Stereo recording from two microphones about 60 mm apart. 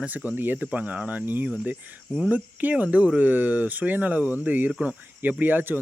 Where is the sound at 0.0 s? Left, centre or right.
Right.